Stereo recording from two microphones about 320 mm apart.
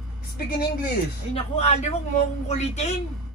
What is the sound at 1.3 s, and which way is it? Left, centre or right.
A man's voice, centre.